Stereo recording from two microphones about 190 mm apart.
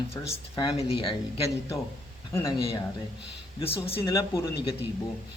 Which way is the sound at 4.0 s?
15° left (ahead or behind).